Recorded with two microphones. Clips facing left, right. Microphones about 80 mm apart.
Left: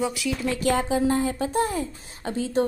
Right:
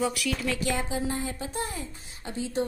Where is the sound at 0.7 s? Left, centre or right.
Left.